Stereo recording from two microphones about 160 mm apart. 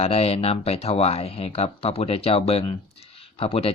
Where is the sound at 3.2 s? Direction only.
35° left (ahead or behind).